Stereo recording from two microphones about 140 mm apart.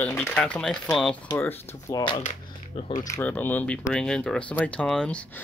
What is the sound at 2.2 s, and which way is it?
Speech, 50° left (ahead or behind).